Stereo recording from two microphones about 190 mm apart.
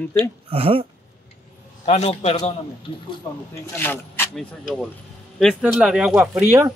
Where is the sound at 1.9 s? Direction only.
35° left (ahead or behind).